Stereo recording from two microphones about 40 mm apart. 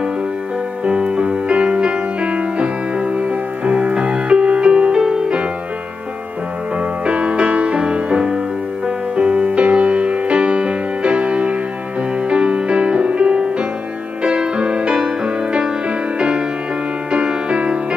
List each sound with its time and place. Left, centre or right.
0.8 s music: right
6.8 s music: right